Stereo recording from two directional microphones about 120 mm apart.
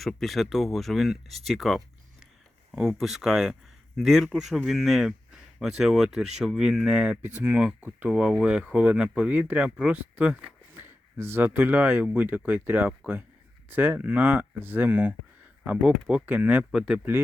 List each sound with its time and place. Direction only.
0.0 s a man's voice: centre (ahead or behind)